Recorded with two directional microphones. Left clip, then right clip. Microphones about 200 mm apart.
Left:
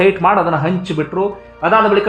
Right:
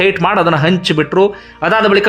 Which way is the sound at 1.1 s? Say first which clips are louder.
Right 6 dB; 25° right (ahead or behind).